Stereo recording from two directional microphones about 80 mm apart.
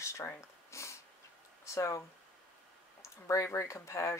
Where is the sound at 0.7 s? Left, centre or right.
Left.